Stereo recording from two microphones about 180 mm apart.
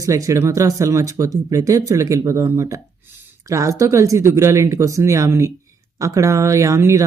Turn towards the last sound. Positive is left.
turn(degrees=-15)  # may be behind; listen again after turning